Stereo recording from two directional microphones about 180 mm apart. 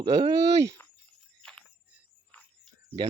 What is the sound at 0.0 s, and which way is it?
Speech, 30° right (ahead or behind).